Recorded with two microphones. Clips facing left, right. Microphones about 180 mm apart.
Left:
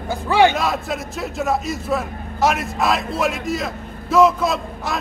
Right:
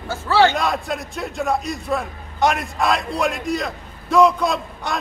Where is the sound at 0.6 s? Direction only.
Centre (ahead or behind).